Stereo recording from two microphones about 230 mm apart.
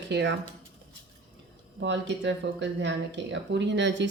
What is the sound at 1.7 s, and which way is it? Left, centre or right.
Speech, right.